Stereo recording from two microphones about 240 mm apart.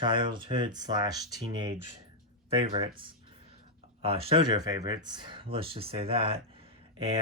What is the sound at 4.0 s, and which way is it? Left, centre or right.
Speech, right.